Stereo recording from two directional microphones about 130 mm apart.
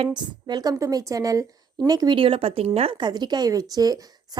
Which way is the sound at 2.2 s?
45° right (ahead or behind).